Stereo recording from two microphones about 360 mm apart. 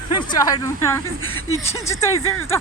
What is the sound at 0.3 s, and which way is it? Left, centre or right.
Speech, centre.